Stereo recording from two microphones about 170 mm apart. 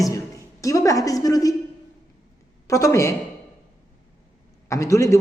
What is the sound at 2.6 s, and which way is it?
Speech, 20° left (ahead or behind).